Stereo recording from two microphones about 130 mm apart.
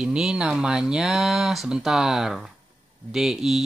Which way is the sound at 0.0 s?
5° right (ahead or behind).